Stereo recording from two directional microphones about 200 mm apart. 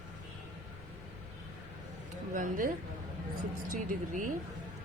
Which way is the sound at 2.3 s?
45° right (ahead or behind).